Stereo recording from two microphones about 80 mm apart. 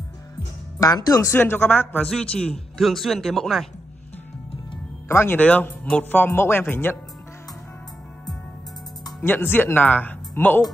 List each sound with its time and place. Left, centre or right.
0.7 s speech: left
1.3 s speech: left
2.0 s a woman's voice: centre
5.0 s speech: left
5.4 s speech: centre
9.2 s speech: left